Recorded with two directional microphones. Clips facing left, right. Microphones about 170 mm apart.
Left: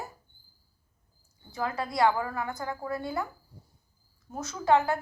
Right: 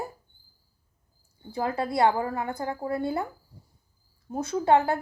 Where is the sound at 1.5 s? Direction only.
30° right (ahead or behind).